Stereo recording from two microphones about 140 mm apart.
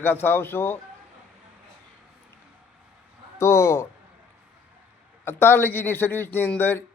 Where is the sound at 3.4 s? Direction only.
20° left (ahead or behind).